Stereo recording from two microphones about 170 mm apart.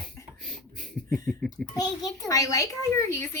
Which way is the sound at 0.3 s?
Centre (ahead or behind).